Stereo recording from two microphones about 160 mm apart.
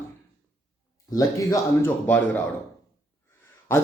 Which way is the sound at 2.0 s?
10° left (ahead or behind).